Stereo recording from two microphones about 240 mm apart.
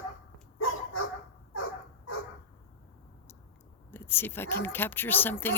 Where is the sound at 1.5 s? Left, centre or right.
Left.